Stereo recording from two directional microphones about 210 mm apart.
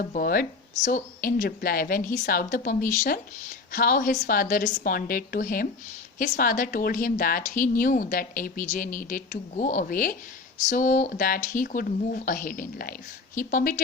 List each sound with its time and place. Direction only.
0.0 s a woman's voice: 40° left (ahead or behind)